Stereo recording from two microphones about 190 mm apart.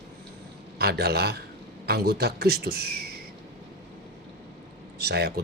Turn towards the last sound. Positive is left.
turn(degrees=-55)  # may be behind; listen again after turning